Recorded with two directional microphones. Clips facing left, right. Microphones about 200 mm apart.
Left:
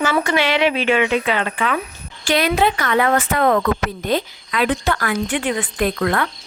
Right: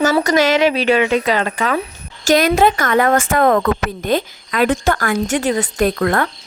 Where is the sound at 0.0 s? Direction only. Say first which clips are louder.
Right 4 dB; 40° right (ahead or behind).